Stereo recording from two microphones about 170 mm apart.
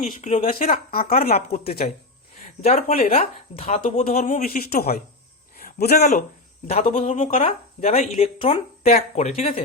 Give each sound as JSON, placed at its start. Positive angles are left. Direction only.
{"t": 0.2, "sound": "speech", "side_deg": 45}
{"t": 5.5, "sound": "a sound", "side_deg": 60}
{"t": 6.7, "sound": "speech", "side_deg": 35}